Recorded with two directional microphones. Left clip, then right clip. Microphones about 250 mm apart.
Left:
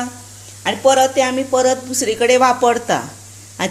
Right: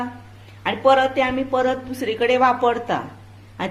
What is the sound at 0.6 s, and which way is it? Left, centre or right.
Speech, left.